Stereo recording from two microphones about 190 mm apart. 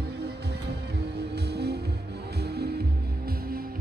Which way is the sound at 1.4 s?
60° right (ahead or behind).